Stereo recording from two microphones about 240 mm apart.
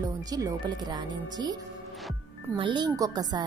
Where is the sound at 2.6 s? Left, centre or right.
Centre.